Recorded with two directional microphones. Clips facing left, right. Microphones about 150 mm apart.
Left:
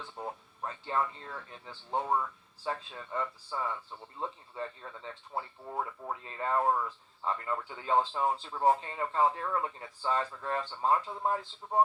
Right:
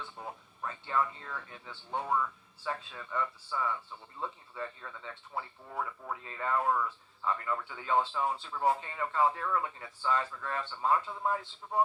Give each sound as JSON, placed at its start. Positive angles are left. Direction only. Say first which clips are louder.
{"t": 0.6, "sound": "speech", "louder": "even", "side_deg": 30}